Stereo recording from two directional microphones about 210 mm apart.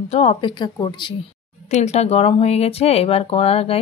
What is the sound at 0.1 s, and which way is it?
Speech, 30° left (ahead or behind).